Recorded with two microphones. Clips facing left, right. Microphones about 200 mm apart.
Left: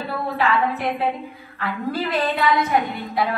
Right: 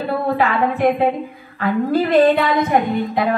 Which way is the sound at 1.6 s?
50° right (ahead or behind).